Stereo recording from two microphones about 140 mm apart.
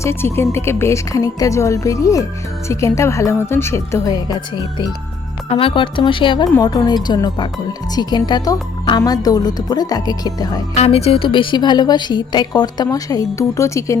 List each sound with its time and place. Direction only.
0.0 s speech: 20° left (ahead or behind)
5.5 s a woman's voice: 40° left (ahead or behind)
10.8 s a woman's voice: 45° left (ahead or behind); by 14.0 s 20° left (ahead or behind)